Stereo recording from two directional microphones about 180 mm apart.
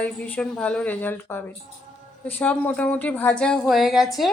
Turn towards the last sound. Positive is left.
turn(degrees=0)  # may be behind; listen again after turning